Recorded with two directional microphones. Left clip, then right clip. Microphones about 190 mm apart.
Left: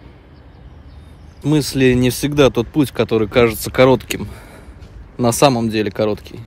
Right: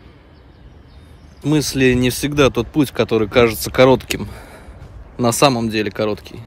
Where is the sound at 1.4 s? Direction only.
15° right (ahead or behind).